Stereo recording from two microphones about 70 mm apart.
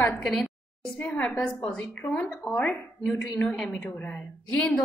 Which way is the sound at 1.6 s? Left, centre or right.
Centre.